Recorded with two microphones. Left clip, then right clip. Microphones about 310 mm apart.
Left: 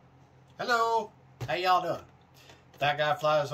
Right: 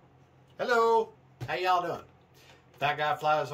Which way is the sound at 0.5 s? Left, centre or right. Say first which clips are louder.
Right 2 dB; centre.